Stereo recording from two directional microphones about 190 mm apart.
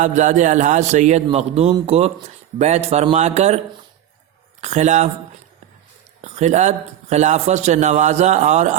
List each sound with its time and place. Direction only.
0.0 s a man's voice: 40° right (ahead or behind)
4.6 s a man's voice: 35° right (ahead or behind)
6.2 s a man's voice: 35° right (ahead or behind)